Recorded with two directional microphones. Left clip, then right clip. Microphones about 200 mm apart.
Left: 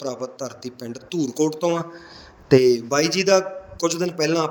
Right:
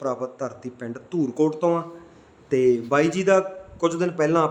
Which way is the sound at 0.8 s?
45° left (ahead or behind).